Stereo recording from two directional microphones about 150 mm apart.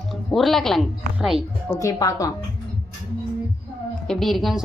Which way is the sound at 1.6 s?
25° left (ahead or behind).